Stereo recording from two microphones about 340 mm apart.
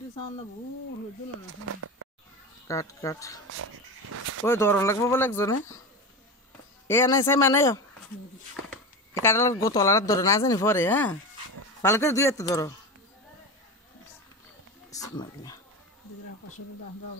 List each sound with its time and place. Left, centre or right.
1.7 s speech: right
2.7 s speech: centre
3.4 s dog: right
4.5 s speech: centre
6.9 s speech: centre
9.2 s speech: centre
14.9 s speech: centre